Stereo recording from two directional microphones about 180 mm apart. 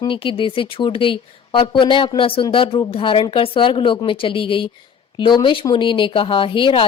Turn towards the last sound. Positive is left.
turn(degrees=30)  # may be behind; listen again after turning